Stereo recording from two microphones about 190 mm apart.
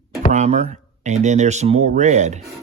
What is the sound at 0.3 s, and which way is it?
Speech, 35° right (ahead or behind).